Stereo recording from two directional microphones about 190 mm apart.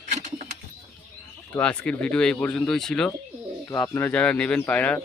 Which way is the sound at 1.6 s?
5° left (ahead or behind).